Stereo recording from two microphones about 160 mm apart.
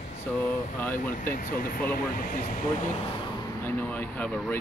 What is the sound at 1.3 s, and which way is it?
Speech, 65° left (ahead or behind).